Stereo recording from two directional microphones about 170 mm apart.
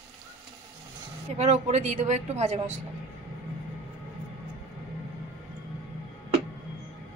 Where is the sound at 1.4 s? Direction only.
40° right (ahead or behind).